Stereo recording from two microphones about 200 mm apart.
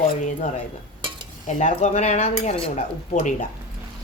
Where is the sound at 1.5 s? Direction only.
35° left (ahead or behind).